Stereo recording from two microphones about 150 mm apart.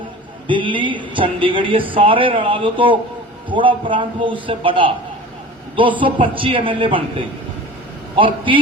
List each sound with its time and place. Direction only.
0.4 s a man's voice: 35° right (ahead or behind)
6.0 s a man's voice: 35° right (ahead or behind)